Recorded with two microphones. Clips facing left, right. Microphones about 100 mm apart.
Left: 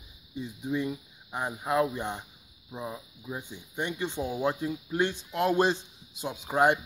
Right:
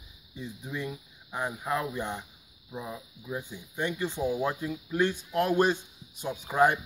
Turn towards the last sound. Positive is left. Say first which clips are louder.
# even
turn(degrees=25)  # may be behind; listen again after turning